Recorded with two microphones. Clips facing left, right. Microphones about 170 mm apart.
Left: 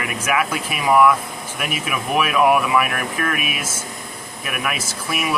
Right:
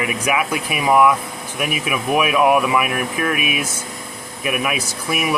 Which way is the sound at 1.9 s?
10° right (ahead or behind).